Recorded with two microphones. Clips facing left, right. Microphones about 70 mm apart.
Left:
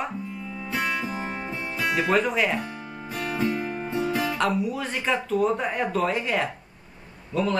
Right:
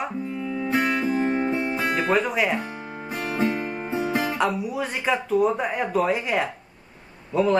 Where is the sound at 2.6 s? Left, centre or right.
Right.